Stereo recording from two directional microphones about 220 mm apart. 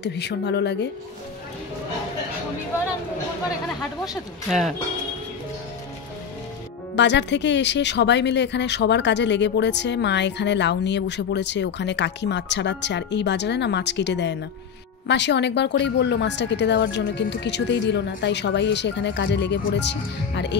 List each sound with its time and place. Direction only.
0.0 s speech: 50° left (ahead or behind)
4.5 s speech: centre (ahead or behind)
7.0 s speech: 55° left (ahead or behind)